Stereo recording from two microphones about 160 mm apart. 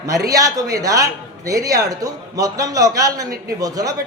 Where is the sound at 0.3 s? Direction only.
20° right (ahead or behind).